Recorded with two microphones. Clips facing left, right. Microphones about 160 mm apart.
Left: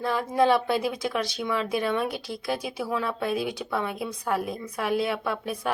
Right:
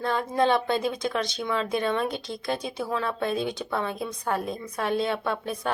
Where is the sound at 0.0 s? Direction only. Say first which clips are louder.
Left 1 dB; 5° left (ahead or behind).